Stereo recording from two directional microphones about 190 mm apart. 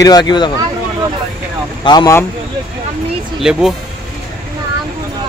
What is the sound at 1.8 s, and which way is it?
Speech, 20° left (ahead or behind).